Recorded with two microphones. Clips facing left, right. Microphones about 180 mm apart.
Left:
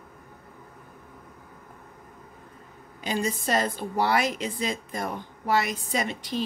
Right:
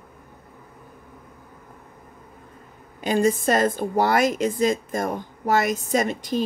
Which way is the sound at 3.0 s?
50° right (ahead or behind).